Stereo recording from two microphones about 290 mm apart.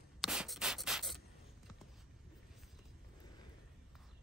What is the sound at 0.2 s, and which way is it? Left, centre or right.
Rub, centre.